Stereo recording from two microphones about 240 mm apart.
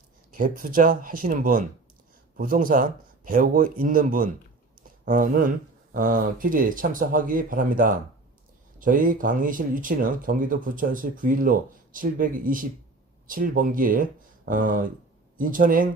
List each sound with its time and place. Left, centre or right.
0.3 s speech: right